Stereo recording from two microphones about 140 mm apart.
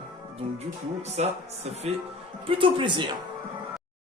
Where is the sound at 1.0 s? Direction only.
50° right (ahead or behind).